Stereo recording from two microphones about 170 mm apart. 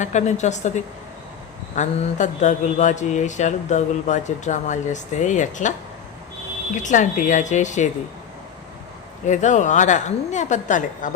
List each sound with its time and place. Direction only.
0.0 s speech: 45° left (ahead or behind)
1.7 s speech: 45° left (ahead or behind)
6.8 s speech: 45° left (ahead or behind)
9.2 s speech: 45° left (ahead or behind)